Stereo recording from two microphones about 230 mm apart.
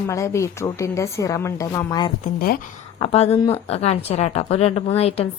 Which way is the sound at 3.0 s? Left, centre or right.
Left.